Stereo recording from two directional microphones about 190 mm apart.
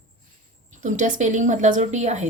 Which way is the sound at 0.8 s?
40° right (ahead or behind).